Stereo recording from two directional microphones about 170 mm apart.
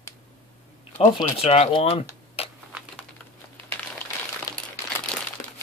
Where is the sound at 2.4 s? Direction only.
35° left (ahead or behind).